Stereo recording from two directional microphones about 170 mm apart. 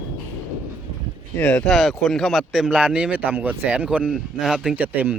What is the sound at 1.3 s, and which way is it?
Speech, 5° left (ahead or behind).